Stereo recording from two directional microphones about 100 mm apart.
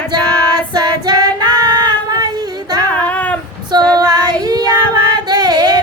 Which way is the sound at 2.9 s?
15° left (ahead or behind).